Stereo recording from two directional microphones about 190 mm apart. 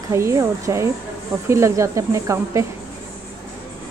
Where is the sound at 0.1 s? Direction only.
15° right (ahead or behind).